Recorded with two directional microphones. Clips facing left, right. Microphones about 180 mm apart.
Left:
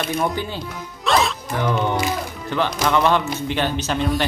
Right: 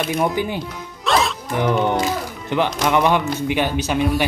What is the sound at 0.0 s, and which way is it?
Speech, 10° right (ahead or behind).